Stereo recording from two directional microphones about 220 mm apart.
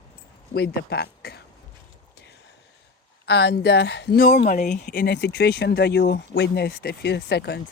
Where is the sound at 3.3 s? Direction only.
50° left (ahead or behind).